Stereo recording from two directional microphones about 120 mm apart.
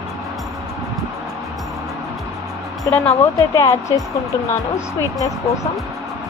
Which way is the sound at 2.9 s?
25° left (ahead or behind).